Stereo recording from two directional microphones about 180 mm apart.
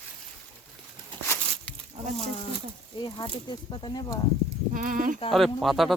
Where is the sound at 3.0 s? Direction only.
25° left (ahead or behind).